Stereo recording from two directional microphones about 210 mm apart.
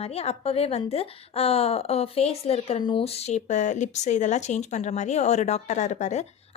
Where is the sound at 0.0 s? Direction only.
30° left (ahead or behind).